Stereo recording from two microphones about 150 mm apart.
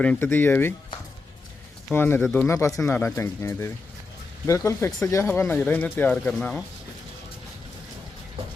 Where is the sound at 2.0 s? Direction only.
15° left (ahead or behind).